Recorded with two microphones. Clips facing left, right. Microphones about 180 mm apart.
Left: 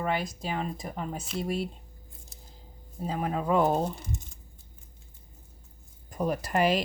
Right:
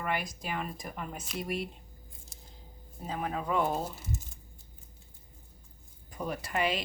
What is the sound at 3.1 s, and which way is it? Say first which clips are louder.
Speech: left 5 dB; 35° left (ahead or behind).